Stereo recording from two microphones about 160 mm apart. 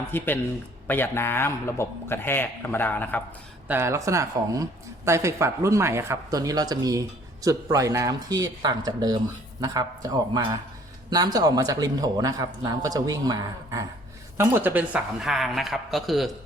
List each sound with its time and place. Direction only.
0.1 s a man's voice: 15° left (ahead or behind)
3.7 s speech: 15° right (ahead or behind); by 16.3 s centre (ahead or behind)